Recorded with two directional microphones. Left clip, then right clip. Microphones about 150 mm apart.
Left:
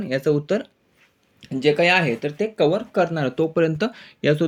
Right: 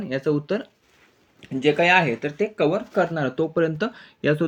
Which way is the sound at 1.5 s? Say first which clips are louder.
Even; 15° left (ahead or behind).